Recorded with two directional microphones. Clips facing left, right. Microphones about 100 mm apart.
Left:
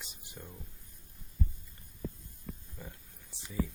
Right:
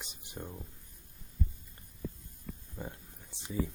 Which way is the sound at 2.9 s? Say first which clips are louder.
Right 4 dB; 20° right (ahead or behind).